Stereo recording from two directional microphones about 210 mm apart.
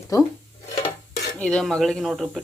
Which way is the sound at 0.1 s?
15° left (ahead or behind).